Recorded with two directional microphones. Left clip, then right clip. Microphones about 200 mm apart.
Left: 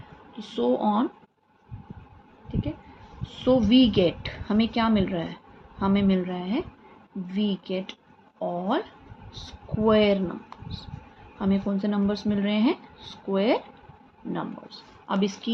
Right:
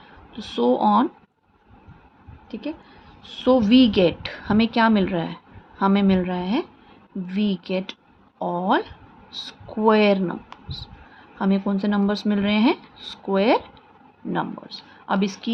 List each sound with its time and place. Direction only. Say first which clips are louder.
0.3 s speech: right 5 dB; 40° right (ahead or behind)
3.2 s speech: right 4 dB; 40° right (ahead or behind)
11.3 s speech: right 4 dB; 35° right (ahead or behind)